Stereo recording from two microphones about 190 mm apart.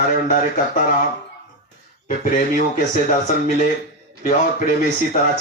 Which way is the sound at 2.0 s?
45° left (ahead or behind).